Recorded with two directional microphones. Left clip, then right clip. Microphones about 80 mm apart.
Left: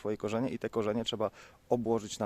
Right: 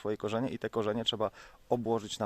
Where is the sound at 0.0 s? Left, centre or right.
Left.